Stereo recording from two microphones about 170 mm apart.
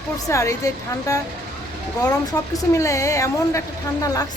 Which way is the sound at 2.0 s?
20° left (ahead or behind).